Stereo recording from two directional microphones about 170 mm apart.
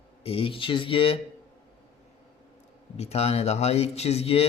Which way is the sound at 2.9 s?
40° left (ahead or behind).